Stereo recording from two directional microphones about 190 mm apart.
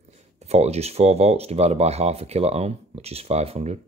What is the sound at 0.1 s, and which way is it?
Speech, 35° right (ahead or behind).